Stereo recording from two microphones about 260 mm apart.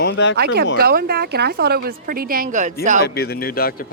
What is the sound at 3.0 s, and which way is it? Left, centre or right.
Speech, left.